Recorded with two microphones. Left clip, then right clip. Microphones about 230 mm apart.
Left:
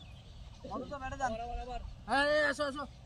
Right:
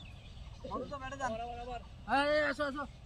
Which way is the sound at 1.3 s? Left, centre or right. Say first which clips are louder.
Even; centre.